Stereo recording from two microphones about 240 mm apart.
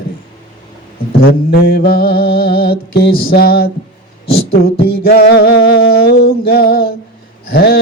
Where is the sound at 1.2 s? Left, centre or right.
Left.